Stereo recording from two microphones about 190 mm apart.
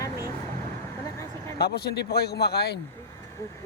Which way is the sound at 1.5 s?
55° left (ahead or behind).